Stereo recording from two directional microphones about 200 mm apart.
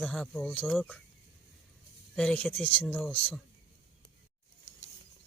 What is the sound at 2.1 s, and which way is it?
Speech, 5° left (ahead or behind).